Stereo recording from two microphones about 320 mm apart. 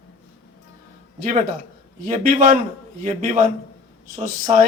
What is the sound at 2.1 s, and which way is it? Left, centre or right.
A man's voice, right.